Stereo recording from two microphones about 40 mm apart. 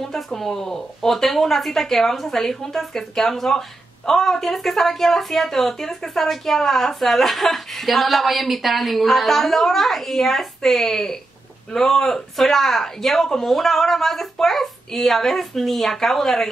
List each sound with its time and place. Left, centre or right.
0.0 s speech: centre